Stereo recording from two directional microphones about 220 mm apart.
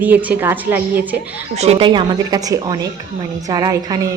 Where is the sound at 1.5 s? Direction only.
30° right (ahead or behind).